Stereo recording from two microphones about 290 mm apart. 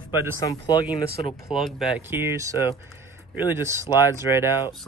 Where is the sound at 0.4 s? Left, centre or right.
Centre.